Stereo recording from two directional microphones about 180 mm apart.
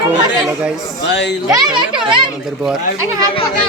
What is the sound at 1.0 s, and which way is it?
Speech, 75° left (ahead or behind).